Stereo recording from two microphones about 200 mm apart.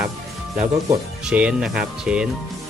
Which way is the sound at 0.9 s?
5° right (ahead or behind).